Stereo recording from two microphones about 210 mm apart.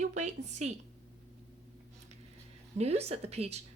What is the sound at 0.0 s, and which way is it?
Speech, 35° right (ahead or behind).